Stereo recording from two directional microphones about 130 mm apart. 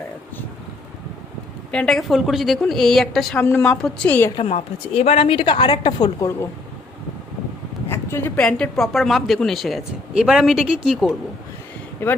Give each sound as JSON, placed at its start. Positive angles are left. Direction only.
{"t": 1.7, "sound": "a woman's voice", "side_deg": 5}
{"t": 4.4, "sound": "a woman's voice", "side_deg": 50}
{"t": 7.9, "sound": "a sound", "side_deg": 20}
{"t": 8.4, "sound": "speech", "side_deg": 5}
{"t": 12.0, "sound": "a woman's voice", "side_deg": 15}